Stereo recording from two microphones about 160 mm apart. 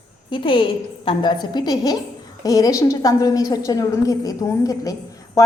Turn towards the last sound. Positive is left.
turn(degrees=20)  # may be behind; listen again after turning